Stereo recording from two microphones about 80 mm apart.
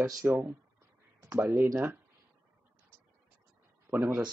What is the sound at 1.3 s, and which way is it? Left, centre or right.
Speech, right.